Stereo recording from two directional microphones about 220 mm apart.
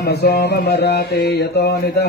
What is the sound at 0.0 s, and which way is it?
Mantra, 45° left (ahead or behind).